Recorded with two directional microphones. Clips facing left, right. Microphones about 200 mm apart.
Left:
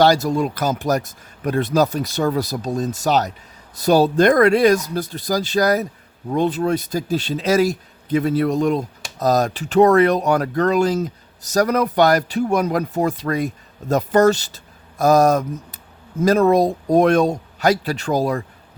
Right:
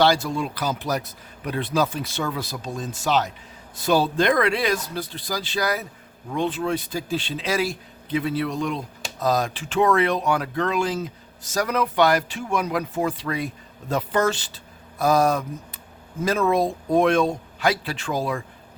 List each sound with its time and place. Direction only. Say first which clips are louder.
0.0 s speech: left 5 dB; 40° left (ahead or behind)